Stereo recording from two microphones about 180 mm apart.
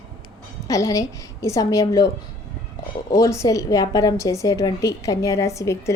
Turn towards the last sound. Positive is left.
turn(degrees=15)  # may be behind; listen again after turning